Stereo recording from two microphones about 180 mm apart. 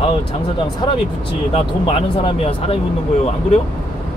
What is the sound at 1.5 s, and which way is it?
Speech, 35° left (ahead or behind).